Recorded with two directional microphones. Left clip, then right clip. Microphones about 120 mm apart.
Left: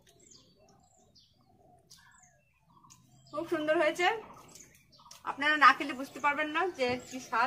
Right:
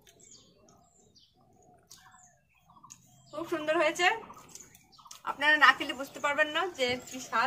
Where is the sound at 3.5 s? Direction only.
15° left (ahead or behind).